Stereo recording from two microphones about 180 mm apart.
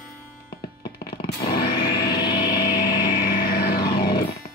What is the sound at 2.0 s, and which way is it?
Music, 25° left (ahead or behind).